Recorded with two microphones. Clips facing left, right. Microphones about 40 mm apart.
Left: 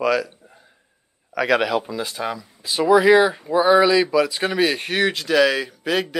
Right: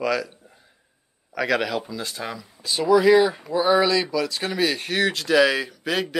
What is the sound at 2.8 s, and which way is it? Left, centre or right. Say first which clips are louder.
Speech: left 2 dB; left.